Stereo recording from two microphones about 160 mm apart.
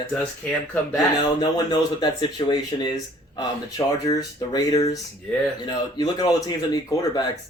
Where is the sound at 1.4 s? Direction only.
25° left (ahead or behind).